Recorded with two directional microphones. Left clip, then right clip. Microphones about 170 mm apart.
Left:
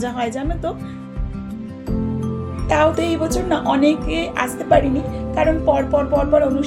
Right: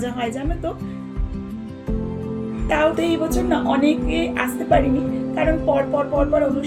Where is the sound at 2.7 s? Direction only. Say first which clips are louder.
Left 2 dB; 35° left (ahead or behind).